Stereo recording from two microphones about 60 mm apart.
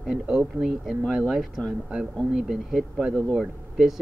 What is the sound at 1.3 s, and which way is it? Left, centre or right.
Speech, centre.